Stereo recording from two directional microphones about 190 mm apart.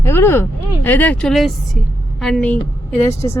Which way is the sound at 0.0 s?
15° left (ahead or behind).